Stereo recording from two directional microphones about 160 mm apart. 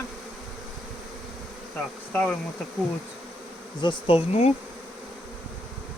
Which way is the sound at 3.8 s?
35° left (ahead or behind).